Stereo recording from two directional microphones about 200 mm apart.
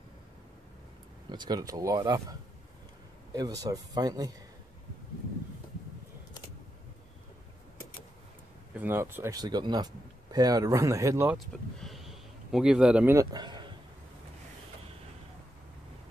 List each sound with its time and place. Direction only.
1.3 s speech: 20° right (ahead or behind)
3.3 s speech: 20° right (ahead or behind)
8.7 s speech: 10° right (ahead or behind)
11.3 s speech: centre (ahead or behind); by 13.7 s 20° right (ahead or behind)